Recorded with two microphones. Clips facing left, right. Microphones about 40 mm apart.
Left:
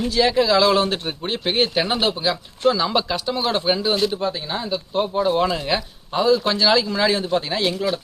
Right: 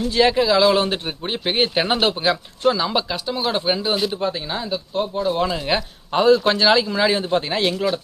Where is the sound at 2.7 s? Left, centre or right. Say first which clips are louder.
Left 1 dB; centre.